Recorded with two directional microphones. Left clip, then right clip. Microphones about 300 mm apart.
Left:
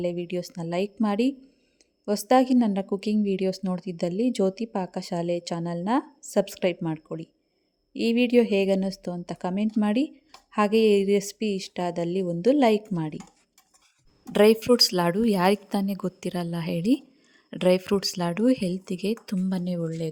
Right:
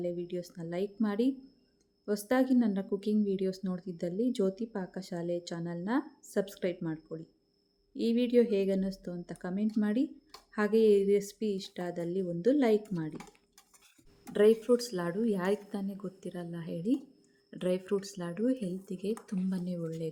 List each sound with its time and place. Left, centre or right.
0.0 s a woman's voice: left
14.3 s a woman's voice: left